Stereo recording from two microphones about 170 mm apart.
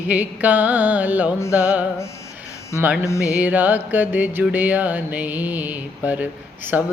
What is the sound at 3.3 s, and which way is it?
Music, 10° right (ahead or behind).